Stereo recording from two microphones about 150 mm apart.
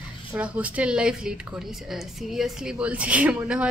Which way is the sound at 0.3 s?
10° right (ahead or behind).